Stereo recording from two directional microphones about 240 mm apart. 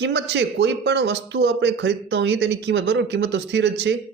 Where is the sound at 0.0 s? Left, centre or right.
Right.